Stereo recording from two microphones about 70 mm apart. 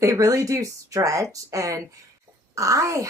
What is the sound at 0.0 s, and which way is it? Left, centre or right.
Speech, right.